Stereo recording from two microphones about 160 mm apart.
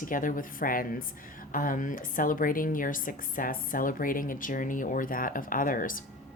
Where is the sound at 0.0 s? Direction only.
55° left (ahead or behind).